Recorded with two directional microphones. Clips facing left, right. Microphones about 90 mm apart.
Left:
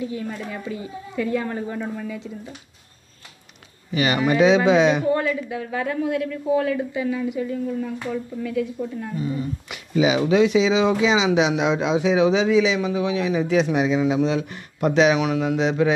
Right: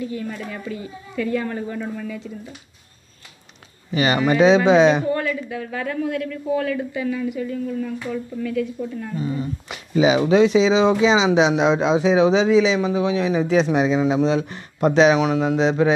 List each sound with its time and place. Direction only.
0.0 s speech: 15° left (ahead or behind)
3.9 s speech: 35° right (ahead or behind)
5.0 s speech: 15° left (ahead or behind)
9.1 s speech: 30° right (ahead or behind)